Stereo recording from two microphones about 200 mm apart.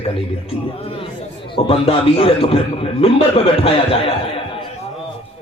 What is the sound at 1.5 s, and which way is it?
A man's voice, 25° left (ahead or behind).